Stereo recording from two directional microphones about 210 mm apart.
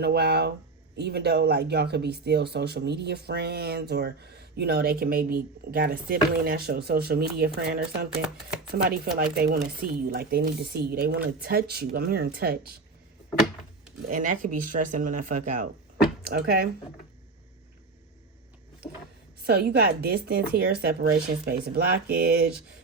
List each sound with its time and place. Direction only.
0.0 s speech: 50° right (ahead or behind)
14.1 s speech: 40° right (ahead or behind)
19.4 s speech: 50° right (ahead or behind)